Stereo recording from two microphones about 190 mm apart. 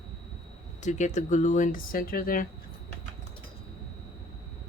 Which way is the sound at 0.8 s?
40° left (ahead or behind).